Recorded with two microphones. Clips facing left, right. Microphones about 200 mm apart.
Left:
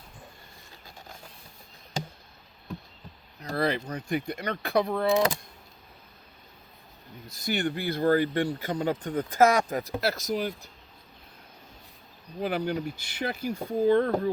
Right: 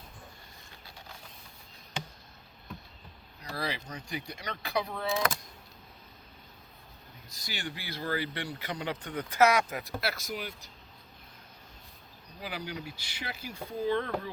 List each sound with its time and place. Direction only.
3.4 s speech: 55° left (ahead or behind)
5.1 s speech: 20° left (ahead or behind)
7.3 s speech: 60° left (ahead or behind); by 10.7 s 40° left (ahead or behind)
12.4 s speech: 55° left (ahead or behind)